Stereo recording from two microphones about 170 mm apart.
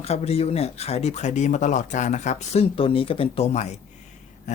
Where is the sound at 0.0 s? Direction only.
35° left (ahead or behind).